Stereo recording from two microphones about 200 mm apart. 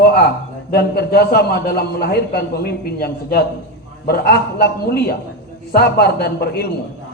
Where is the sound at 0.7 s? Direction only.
55° left (ahead or behind).